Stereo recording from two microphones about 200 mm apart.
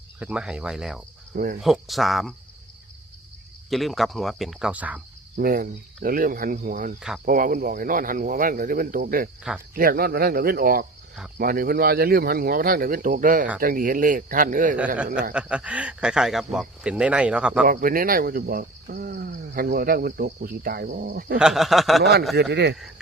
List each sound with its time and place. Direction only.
0.2 s speech: 5° right (ahead or behind)
3.7 s speech: centre (ahead or behind)
5.4 s speech: 45° right (ahead or behind)
14.9 s speech: 5° right (ahead or behind)
17.7 s speech: 45° right (ahead or behind)
21.3 s speech: centre (ahead or behind)
22.4 s speech: 60° right (ahead or behind)